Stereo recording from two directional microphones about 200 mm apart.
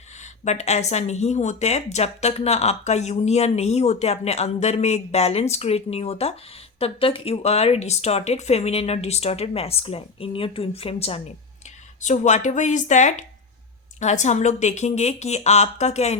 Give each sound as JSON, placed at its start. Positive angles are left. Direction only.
{"t": 0.2, "sound": "speech", "side_deg": 35}